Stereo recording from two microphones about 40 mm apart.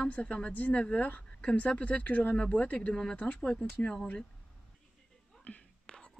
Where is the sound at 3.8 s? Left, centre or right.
Left.